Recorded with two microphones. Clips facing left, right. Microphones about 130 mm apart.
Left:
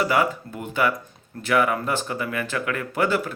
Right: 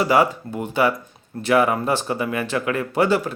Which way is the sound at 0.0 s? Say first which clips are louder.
Right 4 dB; 25° right (ahead or behind).